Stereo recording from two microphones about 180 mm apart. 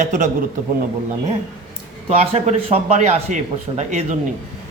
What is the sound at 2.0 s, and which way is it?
A man's voice, 35° right (ahead or behind).